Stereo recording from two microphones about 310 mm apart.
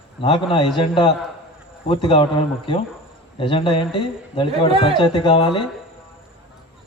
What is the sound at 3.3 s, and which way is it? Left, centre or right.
A man's voice, centre.